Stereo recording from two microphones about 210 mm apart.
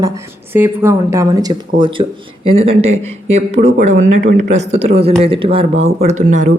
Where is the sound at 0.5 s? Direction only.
10° right (ahead or behind).